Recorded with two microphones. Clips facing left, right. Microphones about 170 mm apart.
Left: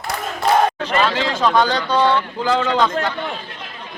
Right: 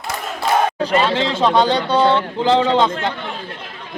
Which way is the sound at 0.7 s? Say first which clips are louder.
Right 4 dB; 35° right (ahead or behind).